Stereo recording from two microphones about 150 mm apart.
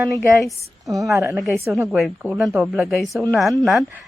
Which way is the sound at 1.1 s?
20° right (ahead or behind).